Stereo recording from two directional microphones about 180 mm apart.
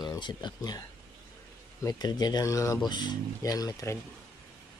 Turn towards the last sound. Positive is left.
turn(degrees=15)  # may be behind; listen again after turning